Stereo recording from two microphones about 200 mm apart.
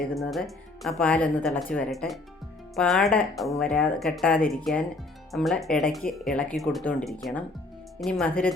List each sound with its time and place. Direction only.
0.1 s speech: centre (ahead or behind)